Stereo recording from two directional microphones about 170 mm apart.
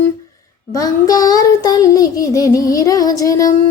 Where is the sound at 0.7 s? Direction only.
20° left (ahead or behind).